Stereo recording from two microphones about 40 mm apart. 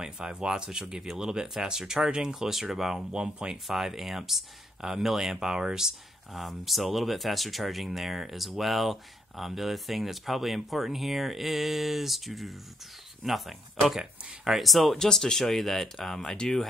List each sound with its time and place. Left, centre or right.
0.0 s speech: right
2.0 s speech: right
2.2 s speech: centre
3.1 s speech: right
3.6 s speech: centre
6.3 s speech: centre
14.6 s speech: centre
15.0 s speech: centre
16.2 s speech: centre